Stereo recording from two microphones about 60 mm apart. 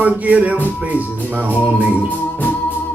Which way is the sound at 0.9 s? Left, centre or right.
Right.